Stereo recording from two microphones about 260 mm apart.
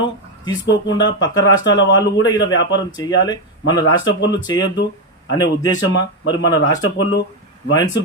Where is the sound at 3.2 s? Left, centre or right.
Centre.